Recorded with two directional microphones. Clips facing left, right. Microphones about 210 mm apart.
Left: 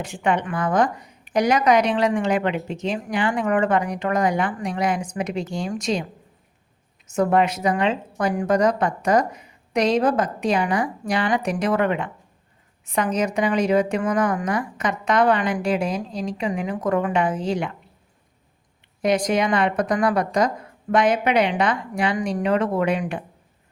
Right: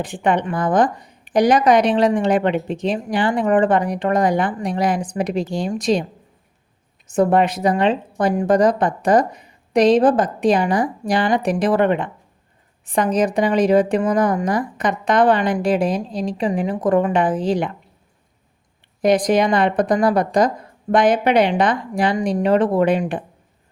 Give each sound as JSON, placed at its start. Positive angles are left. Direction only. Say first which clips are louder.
{"t": 0.0, "sound": "a woman's voice", "louder": "right 3 dB", "side_deg": -35}
{"t": 7.1, "sound": "a woman's voice", "louder": "right 3 dB", "side_deg": -35}
{"t": 19.0, "sound": "a woman's voice", "louder": "right 5 dB", "side_deg": -35}